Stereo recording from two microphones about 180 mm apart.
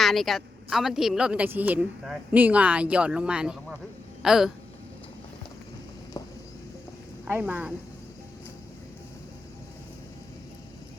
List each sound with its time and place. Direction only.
0.0 s a woman's voice: centre (ahead or behind)
6.2 s a sound: 20° left (ahead or behind)
7.3 s speech: 10° right (ahead or behind)